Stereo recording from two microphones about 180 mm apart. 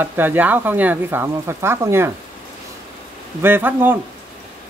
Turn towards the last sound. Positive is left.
turn(degrees=-10)  # may be behind; listen again after turning